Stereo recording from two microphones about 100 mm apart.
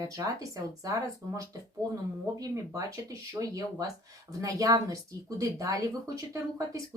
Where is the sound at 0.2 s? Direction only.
35° right (ahead or behind).